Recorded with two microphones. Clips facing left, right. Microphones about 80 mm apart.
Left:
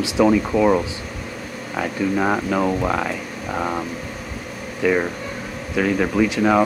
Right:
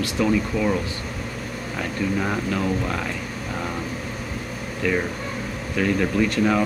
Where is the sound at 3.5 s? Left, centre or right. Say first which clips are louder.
Left 6 dB; left.